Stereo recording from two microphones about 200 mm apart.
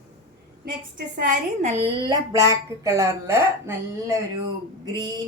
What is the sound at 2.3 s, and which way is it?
A woman's voice, 15° right (ahead or behind).